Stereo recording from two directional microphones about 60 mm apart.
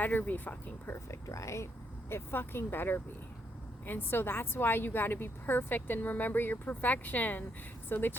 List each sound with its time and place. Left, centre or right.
0.0 s a woman's voice: left
0.9 s a woman's voice: left